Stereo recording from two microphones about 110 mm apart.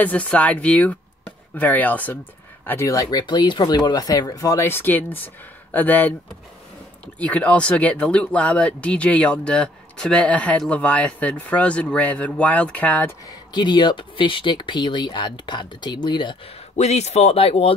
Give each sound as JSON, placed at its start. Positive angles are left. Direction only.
{"t": 0.0, "sound": "speech", "side_deg": 10}
{"t": 7.2, "sound": "speech", "side_deg": 10}
{"t": 13.3, "sound": "speech", "side_deg": 40}
{"t": 16.7, "sound": "speech", "side_deg": 90}